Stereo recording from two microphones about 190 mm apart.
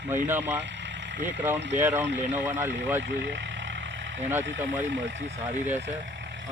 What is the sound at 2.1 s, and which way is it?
Speech, 40° right (ahead or behind).